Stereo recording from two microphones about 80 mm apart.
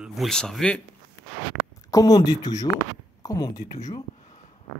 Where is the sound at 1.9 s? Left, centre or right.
Left.